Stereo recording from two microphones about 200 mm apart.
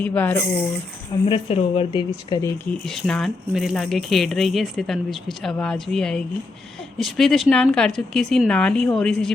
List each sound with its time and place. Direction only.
0.0 s speech: 10° left (ahead or behind)
1.3 s a woman's voice: 30° left (ahead or behind)
2.6 s speech: centre (ahead or behind)